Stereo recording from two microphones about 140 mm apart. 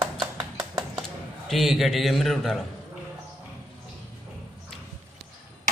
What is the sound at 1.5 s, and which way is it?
A man's voice, centre (ahead or behind).